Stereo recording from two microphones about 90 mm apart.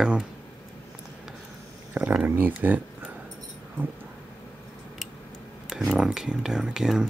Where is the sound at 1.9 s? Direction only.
15° right (ahead or behind).